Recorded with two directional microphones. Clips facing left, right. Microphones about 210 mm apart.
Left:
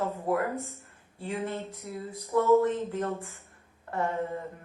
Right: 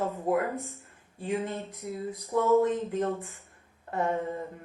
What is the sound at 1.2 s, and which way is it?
A woman's voice, 15° right (ahead or behind).